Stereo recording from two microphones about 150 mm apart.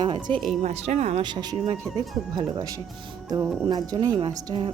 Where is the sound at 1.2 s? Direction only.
30° right (ahead or behind).